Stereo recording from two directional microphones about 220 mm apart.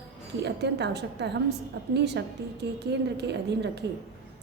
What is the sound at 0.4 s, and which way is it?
A woman's voice, 50° right (ahead or behind).